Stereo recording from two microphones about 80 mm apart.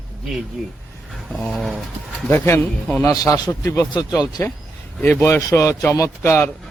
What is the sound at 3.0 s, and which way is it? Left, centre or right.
Speech, left.